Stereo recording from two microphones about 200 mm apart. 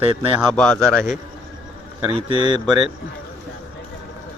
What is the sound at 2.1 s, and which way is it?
Speech, 25° right (ahead or behind).